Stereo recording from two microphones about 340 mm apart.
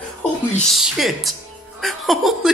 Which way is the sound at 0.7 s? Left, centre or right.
Centre.